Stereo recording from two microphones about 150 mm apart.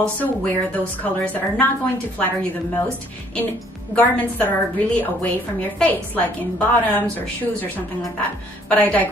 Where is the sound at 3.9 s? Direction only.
10° left (ahead or behind).